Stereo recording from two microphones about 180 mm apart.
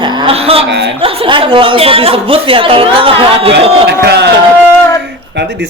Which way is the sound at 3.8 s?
65° right (ahead or behind).